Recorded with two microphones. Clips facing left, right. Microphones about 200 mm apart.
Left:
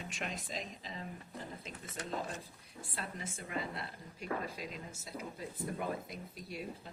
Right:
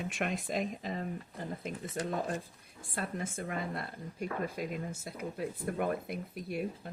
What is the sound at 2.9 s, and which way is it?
A woman's voice, 50° right (ahead or behind).